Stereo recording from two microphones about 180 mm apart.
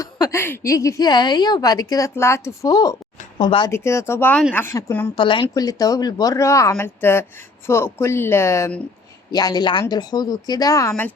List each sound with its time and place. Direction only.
0.0 s a woman's voice: 15° left (ahead or behind)
3.7 s speech: 15° left (ahead or behind)
5.1 s a woman's voice: 25° left (ahead or behind)